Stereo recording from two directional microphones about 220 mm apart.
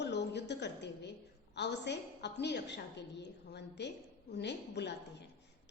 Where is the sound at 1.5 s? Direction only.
50° left (ahead or behind).